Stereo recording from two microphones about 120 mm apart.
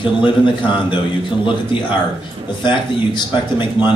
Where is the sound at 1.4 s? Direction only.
45° left (ahead or behind).